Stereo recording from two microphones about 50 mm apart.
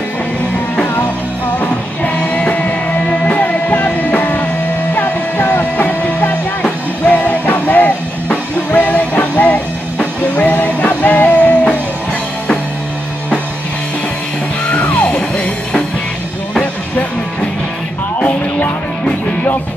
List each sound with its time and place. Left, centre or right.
2.1 s music: left
14.7 s music: left